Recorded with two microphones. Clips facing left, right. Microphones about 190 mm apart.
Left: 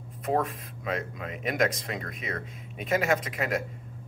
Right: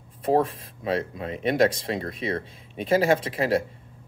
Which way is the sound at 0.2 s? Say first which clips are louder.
Right 6 dB; 30° right (ahead or behind).